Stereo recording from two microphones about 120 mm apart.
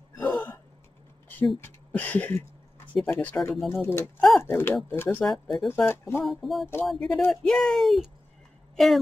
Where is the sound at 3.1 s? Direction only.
15° left (ahead or behind).